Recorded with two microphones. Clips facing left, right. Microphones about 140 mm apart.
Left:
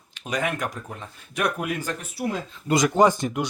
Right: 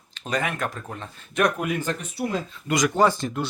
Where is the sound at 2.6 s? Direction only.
25° left (ahead or behind).